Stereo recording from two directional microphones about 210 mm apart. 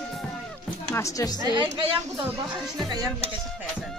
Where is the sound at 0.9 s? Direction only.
15° left (ahead or behind).